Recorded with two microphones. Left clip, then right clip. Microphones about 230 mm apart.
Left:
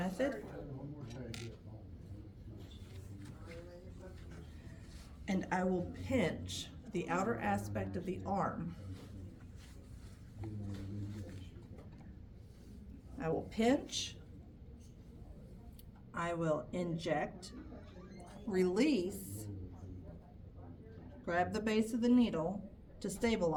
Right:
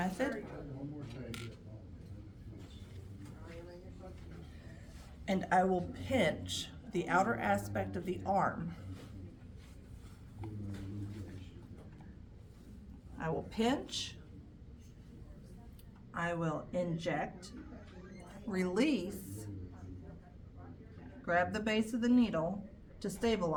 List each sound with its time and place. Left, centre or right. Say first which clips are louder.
0.0 s a sound: right 1 dB; right
5.2 s a woman's voice: right 6 dB; centre
13.1 s speech: even; centre
16.1 s speech: left 1 dB; centre
18.5 s speech: left 1 dB; centre
21.2 s speech: right 3 dB; centre